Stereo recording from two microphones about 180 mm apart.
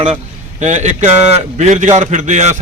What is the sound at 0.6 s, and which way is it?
A man's voice, 40° right (ahead or behind).